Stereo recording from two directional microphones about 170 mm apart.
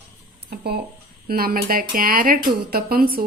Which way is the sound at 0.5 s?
70° right (ahead or behind).